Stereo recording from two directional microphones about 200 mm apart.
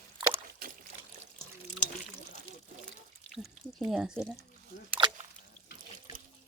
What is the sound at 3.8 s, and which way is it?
Speech, 5° right (ahead or behind).